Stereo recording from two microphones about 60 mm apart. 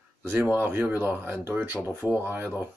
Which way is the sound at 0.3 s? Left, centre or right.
Right.